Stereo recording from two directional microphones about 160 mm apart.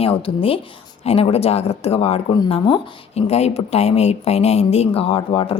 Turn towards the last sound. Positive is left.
turn(degrees=35)  # may be behind; listen again after turning